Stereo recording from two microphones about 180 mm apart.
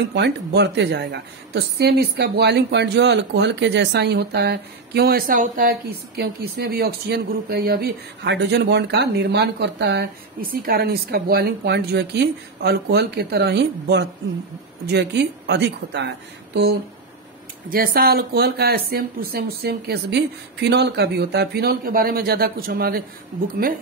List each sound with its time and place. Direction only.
0.1 s a woman's voice: 70° right (ahead or behind)
17.6 s a woman's voice: 55° right (ahead or behind)